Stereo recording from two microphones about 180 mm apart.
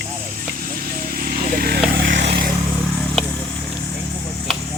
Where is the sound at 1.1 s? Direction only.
55° right (ahead or behind).